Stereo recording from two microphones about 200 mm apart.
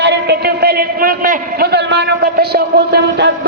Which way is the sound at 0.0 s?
55° right (ahead or behind).